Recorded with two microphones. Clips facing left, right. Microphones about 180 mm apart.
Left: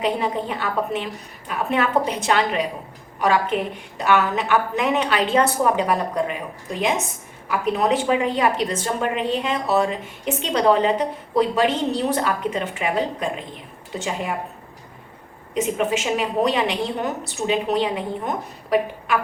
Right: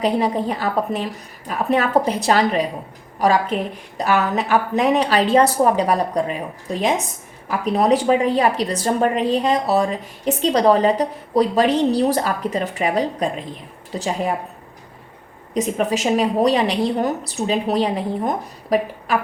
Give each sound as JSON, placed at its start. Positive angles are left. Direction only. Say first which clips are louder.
{"t": 0.0, "sound": "a woman's voice", "louder": "right 4 dB", "side_deg": -35}
{"t": 7.4, "sound": "a woman's voice", "louder": "right 3 dB", "side_deg": -35}
{"t": 15.5, "sound": "a woman's voice", "louder": "right 1 dB", "side_deg": -40}